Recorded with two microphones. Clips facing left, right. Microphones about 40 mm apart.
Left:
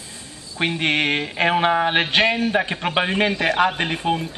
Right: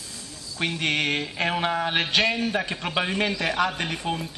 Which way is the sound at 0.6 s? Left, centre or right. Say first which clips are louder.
Left 5 dB; left.